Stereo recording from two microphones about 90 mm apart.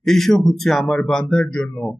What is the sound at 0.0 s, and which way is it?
Speech, 5° left (ahead or behind).